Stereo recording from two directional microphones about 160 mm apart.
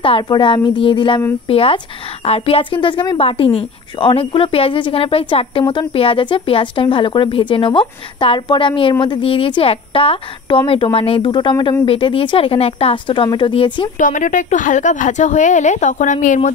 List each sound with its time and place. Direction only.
0.0 s a woman's voice: 30° left (ahead or behind)
13.9 s speech: 55° left (ahead or behind)